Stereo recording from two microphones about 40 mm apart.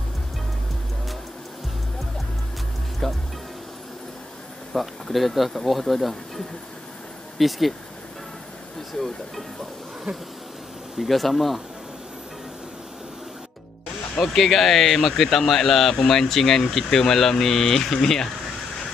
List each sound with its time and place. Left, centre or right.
3.0 s music: centre
4.7 s speech: centre
8.9 s speech: centre
10.1 s bee: right
11.0 s speech: centre
14.2 s speech: centre